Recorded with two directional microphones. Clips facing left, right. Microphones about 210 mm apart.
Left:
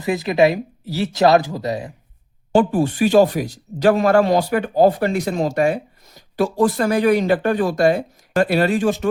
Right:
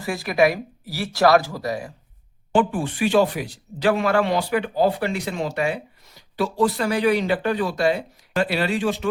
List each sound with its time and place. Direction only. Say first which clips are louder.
0.0 s speech: left 4 dB; 20° left (ahead or behind)
2.5 s speech: left 5 dB; 40° left (ahead or behind)